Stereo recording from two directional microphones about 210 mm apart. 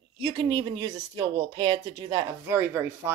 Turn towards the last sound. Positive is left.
turn(degrees=-10)  # may be behind; listen again after turning